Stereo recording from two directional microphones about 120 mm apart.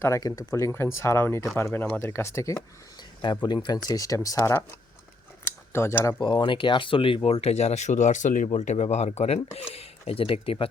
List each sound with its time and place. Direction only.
0.0 s speech: 25° left (ahead or behind)
3.2 s speech: 40° left (ahead or behind); by 4.8 s 20° left (ahead or behind)
5.5 s a sound: 20° left (ahead or behind)
6.1 s speech: 40° left (ahead or behind); by 8.4 s 90° left
8.4 s speech: 70° left (ahead or behind); by 10.7 s 50° left (ahead or behind)